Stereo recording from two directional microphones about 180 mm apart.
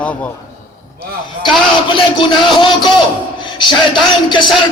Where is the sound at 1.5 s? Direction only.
25° left (ahead or behind).